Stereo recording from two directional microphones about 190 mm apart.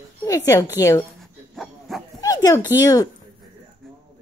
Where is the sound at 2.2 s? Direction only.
20° left (ahead or behind).